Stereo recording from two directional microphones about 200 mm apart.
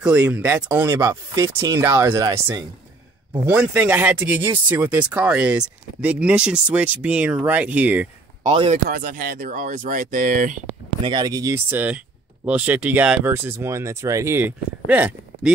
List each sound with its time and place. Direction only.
0.0 s speech: 10° right (ahead or behind)
8.5 s speech: 30° right (ahead or behind)
8.8 s speech: 45° right (ahead or behind)
11.0 s speech: 20° right (ahead or behind); by 15.5 s 5° right (ahead or behind)